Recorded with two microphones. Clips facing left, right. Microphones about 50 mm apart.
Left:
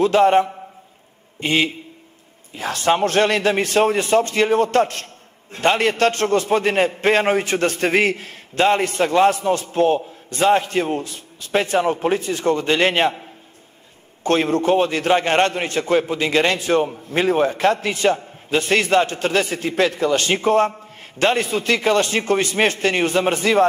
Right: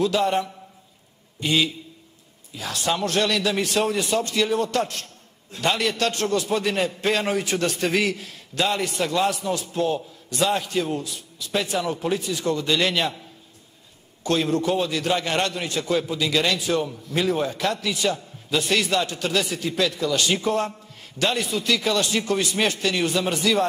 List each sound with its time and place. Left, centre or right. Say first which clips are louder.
0.0 s a man's voice: left 7 dB; left